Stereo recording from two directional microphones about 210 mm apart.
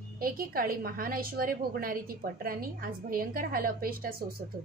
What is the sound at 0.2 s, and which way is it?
A woman's voice, 45° right (ahead or behind).